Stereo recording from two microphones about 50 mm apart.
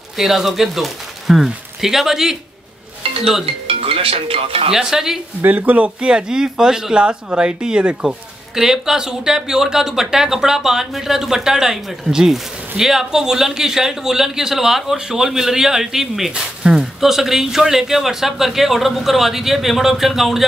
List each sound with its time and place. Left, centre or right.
0.2 s speech: centre
4.7 s speech: centre
5.4 s speech: right
5.9 s speech: centre
16.6 s speech: centre
17.0 s a man's voice: centre